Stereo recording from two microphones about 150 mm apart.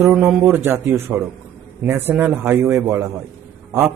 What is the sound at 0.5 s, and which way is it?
A man's voice, 15° right (ahead or behind).